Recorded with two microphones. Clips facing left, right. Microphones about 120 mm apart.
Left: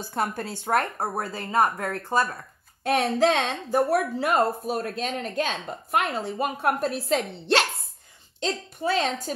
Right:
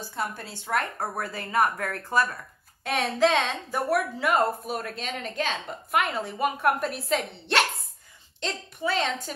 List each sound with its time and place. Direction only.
0.1 s a woman's voice: 50° left (ahead or behind)
0.9 s speech: 30° left (ahead or behind)
2.8 s a woman's voice: 45° left (ahead or behind)